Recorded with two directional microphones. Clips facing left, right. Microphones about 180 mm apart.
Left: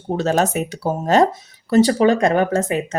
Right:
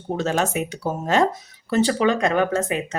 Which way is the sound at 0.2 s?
40° left (ahead or behind).